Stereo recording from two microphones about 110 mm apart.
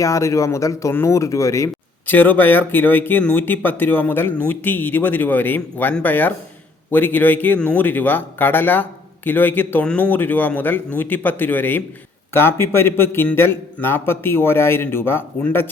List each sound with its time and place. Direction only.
0.0 s a man's voice: 30° left (ahead or behind)
2.1 s a man's voice: 15° left (ahead or behind)